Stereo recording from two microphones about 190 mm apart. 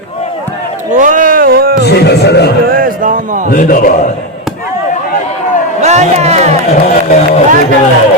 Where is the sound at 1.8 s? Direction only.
60° left (ahead or behind).